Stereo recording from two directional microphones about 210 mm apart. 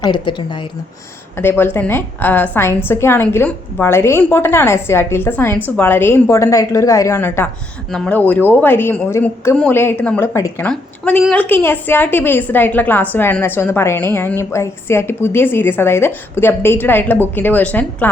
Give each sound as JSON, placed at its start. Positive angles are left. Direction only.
{"t": 0.0, "sound": "a woman's voice", "side_deg": 20}
{"t": 1.4, "sound": "a woman's voice", "side_deg": 10}